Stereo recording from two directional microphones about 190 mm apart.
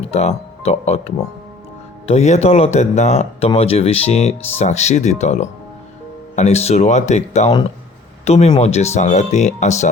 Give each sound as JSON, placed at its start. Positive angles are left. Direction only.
{"t": 0.0, "sound": "speech", "side_deg": 35}